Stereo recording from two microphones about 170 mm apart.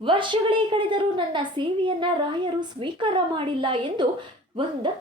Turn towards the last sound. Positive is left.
turn(degrees=-30)  # may be behind; listen again after turning